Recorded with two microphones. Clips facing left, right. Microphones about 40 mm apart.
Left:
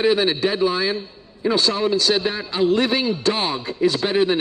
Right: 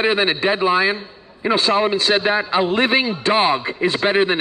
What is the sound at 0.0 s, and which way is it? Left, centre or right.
A man's voice, right.